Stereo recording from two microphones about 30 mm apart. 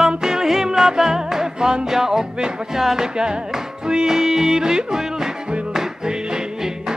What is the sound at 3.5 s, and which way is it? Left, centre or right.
Music, right.